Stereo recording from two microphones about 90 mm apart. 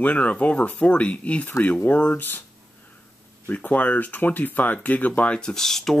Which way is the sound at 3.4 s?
20° left (ahead or behind).